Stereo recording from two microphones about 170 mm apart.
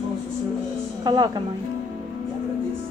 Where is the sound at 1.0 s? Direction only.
25° right (ahead or behind).